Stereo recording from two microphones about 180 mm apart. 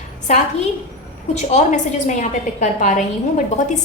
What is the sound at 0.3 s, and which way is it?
A woman's voice, 35° left (ahead or behind).